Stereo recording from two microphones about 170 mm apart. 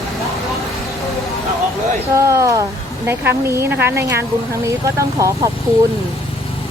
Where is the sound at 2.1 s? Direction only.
15° right (ahead or behind).